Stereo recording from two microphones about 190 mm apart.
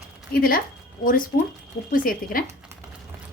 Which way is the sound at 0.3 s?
50° left (ahead or behind).